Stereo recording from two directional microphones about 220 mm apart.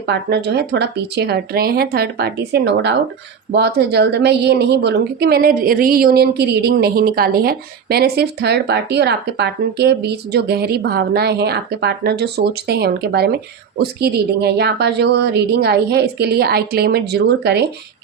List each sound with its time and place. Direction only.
0.0 s a woman's voice: 50° right (ahead or behind)